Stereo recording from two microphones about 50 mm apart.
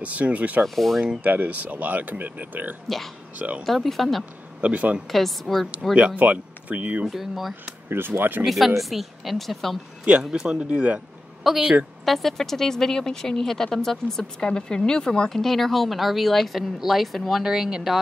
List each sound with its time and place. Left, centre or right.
0.0 s speech: right
0.7 s a woman's voice: centre
1.2 s speech: right
3.6 s a woman's voice: centre
4.6 s speech: right
5.1 s a woman's voice: centre
5.9 s speech: right
7.1 s a woman's voice: centre
8.1 s speech: right
8.5 s a woman's voice: centre
10.2 s speech: centre
10.5 s speech: right
11.4 s a woman's voice: centre
17.4 s speech: centre